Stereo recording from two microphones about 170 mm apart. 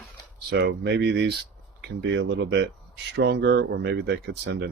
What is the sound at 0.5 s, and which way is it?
Speech, 80° right.